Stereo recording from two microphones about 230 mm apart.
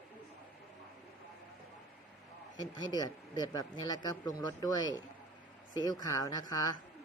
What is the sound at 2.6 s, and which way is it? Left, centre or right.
Speech, centre.